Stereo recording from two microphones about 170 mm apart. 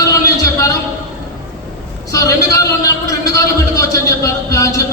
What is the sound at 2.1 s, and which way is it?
A man's voice, 20° left (ahead or behind).